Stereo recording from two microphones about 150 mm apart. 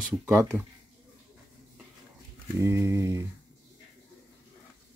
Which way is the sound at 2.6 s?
20° right (ahead or behind).